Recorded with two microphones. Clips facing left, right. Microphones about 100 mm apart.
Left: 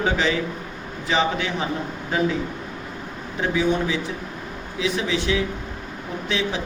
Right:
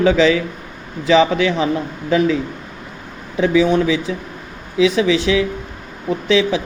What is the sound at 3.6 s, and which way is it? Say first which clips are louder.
Speech: right 7 dB; 90° right.